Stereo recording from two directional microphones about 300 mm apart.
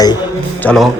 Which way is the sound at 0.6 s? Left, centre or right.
Centre.